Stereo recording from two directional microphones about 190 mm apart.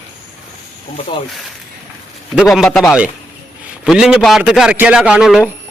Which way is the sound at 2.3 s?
5° right (ahead or behind).